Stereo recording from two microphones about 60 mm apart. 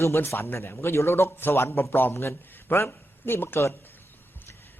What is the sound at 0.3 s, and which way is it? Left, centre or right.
A man's voice, left.